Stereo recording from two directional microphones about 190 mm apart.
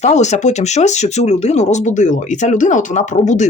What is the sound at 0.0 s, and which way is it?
Speech, 35° left (ahead or behind).